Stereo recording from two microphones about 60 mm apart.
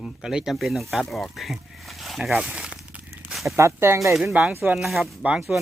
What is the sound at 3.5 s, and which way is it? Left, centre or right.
Speech, right.